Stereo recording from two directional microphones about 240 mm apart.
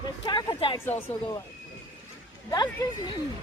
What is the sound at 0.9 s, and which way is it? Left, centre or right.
Speech, centre.